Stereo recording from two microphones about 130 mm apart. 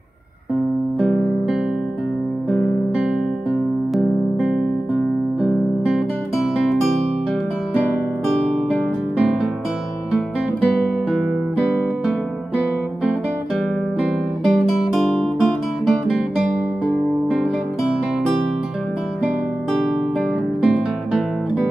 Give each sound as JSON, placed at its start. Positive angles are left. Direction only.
{"t": 3.9, "sound": "music", "side_deg": 0}
{"t": 5.4, "sound": "guitar", "side_deg": -5}
{"t": 10.1, "sound": "music", "side_deg": -5}
{"t": 14.4, "sound": "guitar", "side_deg": 0}
{"t": 17.3, "sound": "music", "side_deg": -10}
{"t": 20.6, "sound": "music", "side_deg": -5}